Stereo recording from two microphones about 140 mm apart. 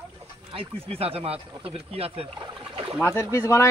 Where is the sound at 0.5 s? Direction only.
40° right (ahead or behind).